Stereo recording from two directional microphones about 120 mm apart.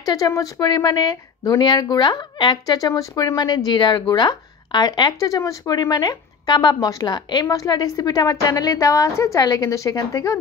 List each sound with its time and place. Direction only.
0.0 s speech: 30° left (ahead or behind)